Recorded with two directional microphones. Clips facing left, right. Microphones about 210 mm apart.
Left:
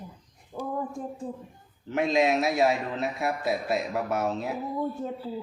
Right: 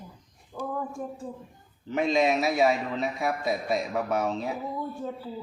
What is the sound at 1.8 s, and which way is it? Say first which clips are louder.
A man's voice: even; centre (ahead or behind).